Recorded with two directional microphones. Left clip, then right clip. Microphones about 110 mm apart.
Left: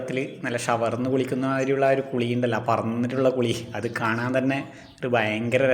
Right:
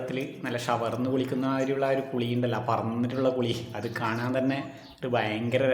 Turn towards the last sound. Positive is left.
turn(degrees=25)  # may be behind; listen again after turning